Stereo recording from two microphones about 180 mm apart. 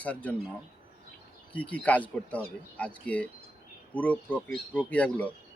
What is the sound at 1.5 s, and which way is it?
Speech, 10° left (ahead or behind).